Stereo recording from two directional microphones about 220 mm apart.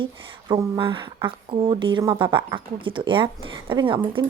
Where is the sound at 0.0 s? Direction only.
20° right (ahead or behind).